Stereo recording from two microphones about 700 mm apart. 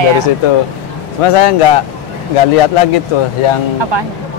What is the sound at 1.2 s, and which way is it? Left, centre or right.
Speech, left.